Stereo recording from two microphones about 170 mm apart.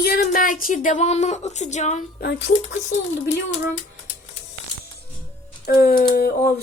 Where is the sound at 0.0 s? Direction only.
55° left (ahead or behind).